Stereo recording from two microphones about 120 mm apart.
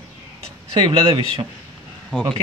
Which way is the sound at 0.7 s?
45° right (ahead or behind).